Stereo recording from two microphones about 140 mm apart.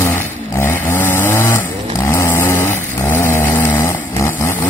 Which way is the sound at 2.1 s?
15° left (ahead or behind).